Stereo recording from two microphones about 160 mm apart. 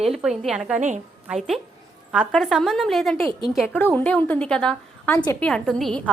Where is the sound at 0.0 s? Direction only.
Centre (ahead or behind).